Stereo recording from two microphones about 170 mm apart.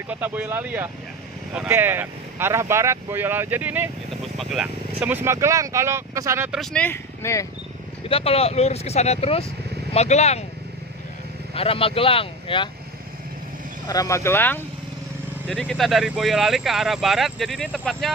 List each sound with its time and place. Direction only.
0.1 s speech: 10° right (ahead or behind)
6.5 s speech: 5° left (ahead or behind)
8.1 s speech: 35° left (ahead or behind)
11.5 s speech: 35° left (ahead or behind)
13.8 s speech: 20° left (ahead or behind); by 18.1 s centre (ahead or behind)